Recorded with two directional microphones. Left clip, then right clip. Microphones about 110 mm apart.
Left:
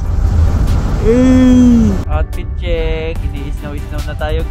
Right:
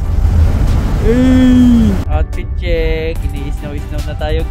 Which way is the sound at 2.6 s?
35° right (ahead or behind).